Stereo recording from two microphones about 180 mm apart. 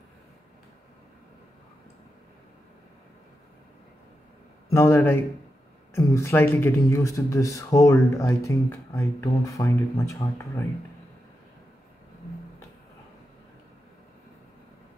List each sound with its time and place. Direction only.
4.6 s speech: 15° left (ahead or behind)